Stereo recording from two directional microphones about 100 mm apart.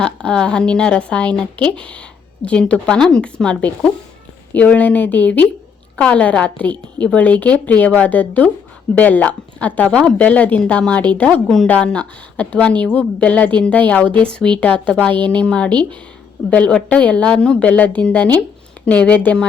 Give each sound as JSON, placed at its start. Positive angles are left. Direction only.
{"t": 0.0, "sound": "a woman's voice", "side_deg": 10}